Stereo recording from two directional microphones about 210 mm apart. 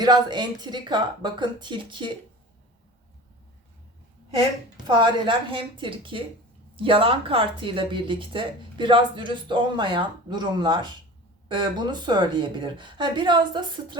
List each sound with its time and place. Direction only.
0.0 s speech: 20° right (ahead or behind)
4.9 s speech: 20° right (ahead or behind)